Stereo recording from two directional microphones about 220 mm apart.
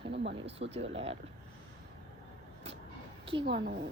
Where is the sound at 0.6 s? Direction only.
40° right (ahead or behind).